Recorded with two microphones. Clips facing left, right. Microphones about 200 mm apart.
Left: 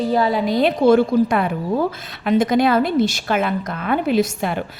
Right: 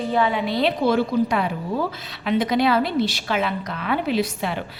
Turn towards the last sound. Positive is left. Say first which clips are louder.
# left 4 dB
turn(degrees=50)  # may be behind; listen again after turning